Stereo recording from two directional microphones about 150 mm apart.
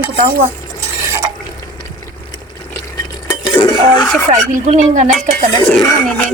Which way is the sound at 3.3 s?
20° left (ahead or behind).